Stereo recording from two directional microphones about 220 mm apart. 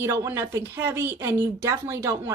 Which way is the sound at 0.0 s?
10° right (ahead or behind).